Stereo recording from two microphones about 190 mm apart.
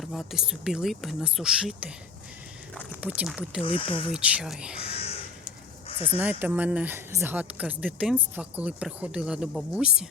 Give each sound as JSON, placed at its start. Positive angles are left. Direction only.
{"t": 0.0, "sound": "speech", "side_deg": 0}
{"t": 2.9, "sound": "speech", "side_deg": -10}
{"t": 3.6, "sound": "speech", "side_deg": 25}
{"t": 4.1, "sound": "speech", "side_deg": -5}
{"t": 4.8, "sound": "crow", "side_deg": 30}
{"t": 6.1, "sound": "speech", "side_deg": -10}